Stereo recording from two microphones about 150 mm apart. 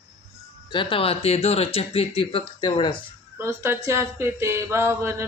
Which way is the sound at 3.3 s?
15° right (ahead or behind).